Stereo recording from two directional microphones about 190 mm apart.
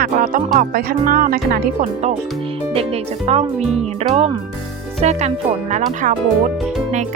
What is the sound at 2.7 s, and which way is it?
Speech, 30° right (ahead or behind).